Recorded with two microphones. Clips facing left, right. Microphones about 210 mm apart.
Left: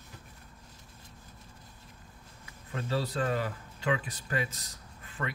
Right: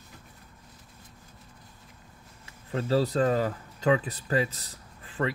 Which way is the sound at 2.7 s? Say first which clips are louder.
Right 7 dB; 35° right (ahead or behind).